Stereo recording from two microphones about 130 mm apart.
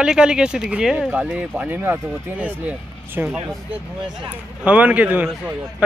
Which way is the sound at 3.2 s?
15° right (ahead or behind).